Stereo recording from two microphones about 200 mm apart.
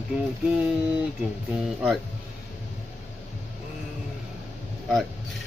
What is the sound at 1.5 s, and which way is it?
Speech, 5° right (ahead or behind).